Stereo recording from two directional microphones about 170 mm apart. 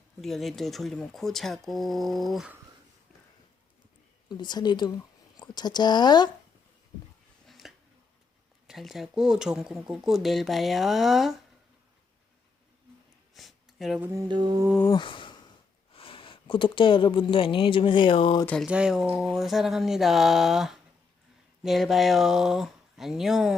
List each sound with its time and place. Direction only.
0.2 s speech: centre (ahead or behind)
4.3 s speech: 25° left (ahead or behind)
7.4 s a sound: centre (ahead or behind)
8.6 s speech: centre (ahead or behind)
13.3 s a sound: centre (ahead or behind)
14.1 s mantra: 20° right (ahead or behind)
14.9 s a sound: 30° left (ahead or behind)
15.9 s speech: 30° left (ahead or behind)
18.4 s speech: 5° left (ahead or behind)